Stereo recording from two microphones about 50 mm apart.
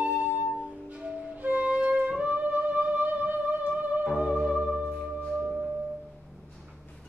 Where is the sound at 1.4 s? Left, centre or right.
Right.